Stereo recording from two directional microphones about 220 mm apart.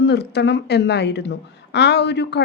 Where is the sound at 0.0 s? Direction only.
50° left (ahead or behind).